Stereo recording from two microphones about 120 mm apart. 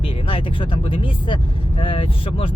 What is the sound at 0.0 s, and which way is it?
Speech, 45° left (ahead or behind).